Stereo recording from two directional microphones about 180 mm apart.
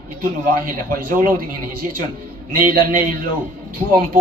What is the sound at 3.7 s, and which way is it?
Speech, 50° right (ahead or behind).